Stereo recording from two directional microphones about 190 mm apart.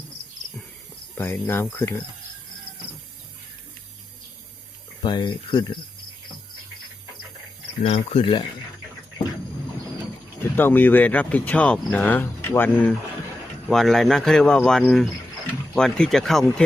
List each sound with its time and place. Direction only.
1.2 s speech: 10° left (ahead or behind)
5.0 s speech: 25° left (ahead or behind)
7.8 s speech: 30° left (ahead or behind)
10.5 s speech: 10° left (ahead or behind)